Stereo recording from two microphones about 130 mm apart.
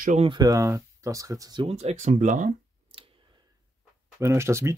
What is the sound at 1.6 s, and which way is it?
Speech, 55° right (ahead or behind).